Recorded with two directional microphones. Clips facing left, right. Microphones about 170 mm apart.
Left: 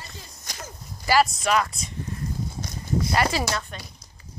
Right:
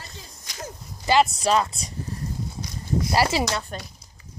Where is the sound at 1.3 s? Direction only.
30° right (ahead or behind).